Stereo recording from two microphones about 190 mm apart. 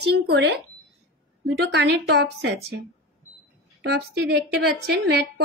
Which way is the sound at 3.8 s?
60° right (ahead or behind).